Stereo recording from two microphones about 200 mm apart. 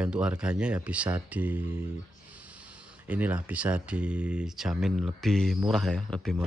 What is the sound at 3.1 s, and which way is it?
Speech, 10° right (ahead or behind).